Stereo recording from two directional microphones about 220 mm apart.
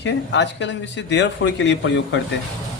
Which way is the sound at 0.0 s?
55° left (ahead or behind).